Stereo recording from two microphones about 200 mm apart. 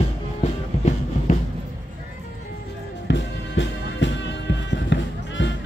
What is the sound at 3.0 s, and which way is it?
Music, 60° left (ahead or behind).